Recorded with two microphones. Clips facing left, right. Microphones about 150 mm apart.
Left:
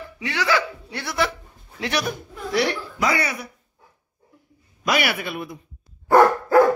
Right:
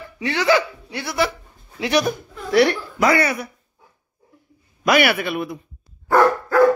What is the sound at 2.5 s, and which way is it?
Speech, 60° right (ahead or behind).